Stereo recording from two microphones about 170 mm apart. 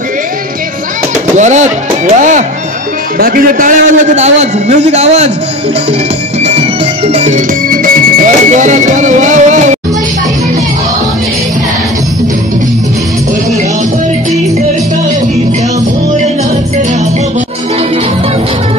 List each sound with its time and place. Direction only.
1.3 s a man's voice: 45° right (ahead or behind)
3.2 s a man's voice: 60° right (ahead or behind); by 5.3 s 40° right (ahead or behind)
6.4 s music: 35° right (ahead or behind)